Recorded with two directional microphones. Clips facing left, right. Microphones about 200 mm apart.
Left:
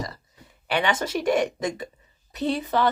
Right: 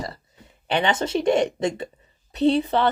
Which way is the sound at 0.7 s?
25° right (ahead or behind).